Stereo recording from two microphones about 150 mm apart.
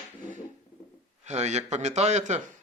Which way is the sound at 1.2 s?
50° right (ahead or behind).